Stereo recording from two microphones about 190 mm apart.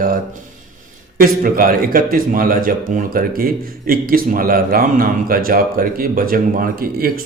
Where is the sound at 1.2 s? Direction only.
50° right (ahead or behind).